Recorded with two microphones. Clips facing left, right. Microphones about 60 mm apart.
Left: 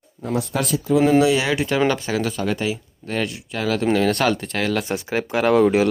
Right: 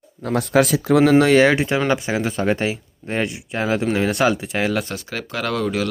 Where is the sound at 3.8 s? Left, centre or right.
Centre.